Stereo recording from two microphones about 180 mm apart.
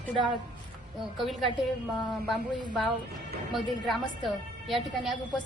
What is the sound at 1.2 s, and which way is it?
Speech, centre (ahead or behind).